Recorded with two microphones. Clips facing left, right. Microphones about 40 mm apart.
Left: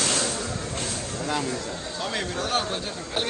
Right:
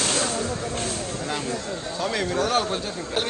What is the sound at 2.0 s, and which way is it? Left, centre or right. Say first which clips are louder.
Speech: right 5 dB; right.